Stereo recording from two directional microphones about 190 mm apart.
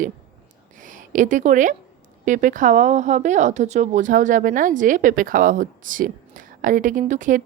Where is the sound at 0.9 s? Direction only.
45° right (ahead or behind).